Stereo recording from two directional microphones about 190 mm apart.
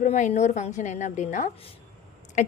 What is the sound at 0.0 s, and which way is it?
A woman's voice, 40° left (ahead or behind).